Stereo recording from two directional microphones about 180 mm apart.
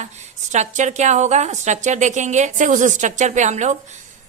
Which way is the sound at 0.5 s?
40° right (ahead or behind).